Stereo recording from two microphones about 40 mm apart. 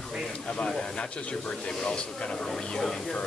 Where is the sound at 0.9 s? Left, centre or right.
Left.